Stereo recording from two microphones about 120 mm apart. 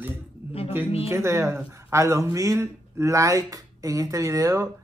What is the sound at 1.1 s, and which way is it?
Speech, 25° right (ahead or behind).